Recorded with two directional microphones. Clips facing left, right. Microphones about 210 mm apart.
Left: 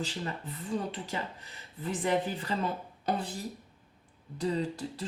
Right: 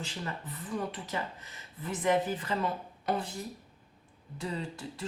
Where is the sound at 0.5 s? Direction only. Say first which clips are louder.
Left 2 dB; 30° left (ahead or behind).